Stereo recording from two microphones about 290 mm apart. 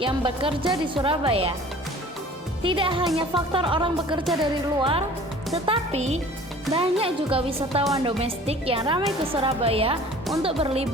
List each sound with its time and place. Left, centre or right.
0.0 s speech: centre
2.6 s a woman's voice: centre